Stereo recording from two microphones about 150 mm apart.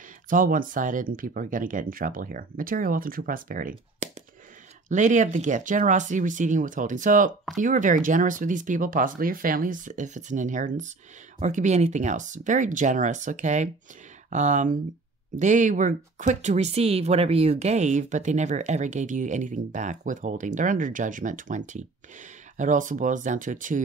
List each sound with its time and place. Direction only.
0.3 s speech: 65° right (ahead or behind)